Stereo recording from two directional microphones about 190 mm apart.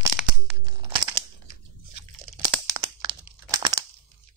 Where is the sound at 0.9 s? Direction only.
20° right (ahead or behind).